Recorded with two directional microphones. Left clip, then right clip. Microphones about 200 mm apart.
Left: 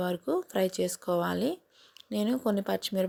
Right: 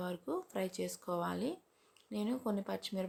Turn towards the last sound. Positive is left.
turn(degrees=35)  # may be behind; listen again after turning